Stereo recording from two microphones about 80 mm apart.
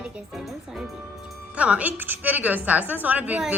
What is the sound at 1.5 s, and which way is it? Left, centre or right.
A woman's voice, centre.